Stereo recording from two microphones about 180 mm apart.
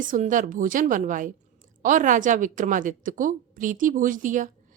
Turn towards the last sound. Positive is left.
turn(degrees=-45)  # may be behind; listen again after turning